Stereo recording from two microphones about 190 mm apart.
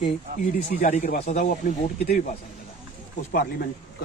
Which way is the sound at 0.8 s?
40° left (ahead or behind).